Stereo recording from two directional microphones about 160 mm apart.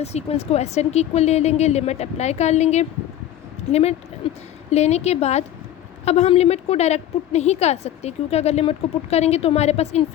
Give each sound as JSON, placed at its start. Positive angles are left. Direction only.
{"t": 0.0, "sound": "a woman's voice", "side_deg": 40}
{"t": 4.7, "sound": "a woman's voice", "side_deg": 40}